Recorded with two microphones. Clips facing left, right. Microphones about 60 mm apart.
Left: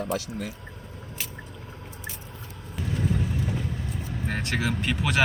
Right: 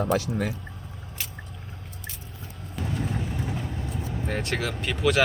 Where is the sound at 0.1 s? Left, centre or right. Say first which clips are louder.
Right 5 dB; right.